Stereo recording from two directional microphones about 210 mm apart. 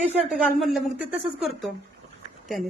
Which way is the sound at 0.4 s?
Centre (ahead or behind).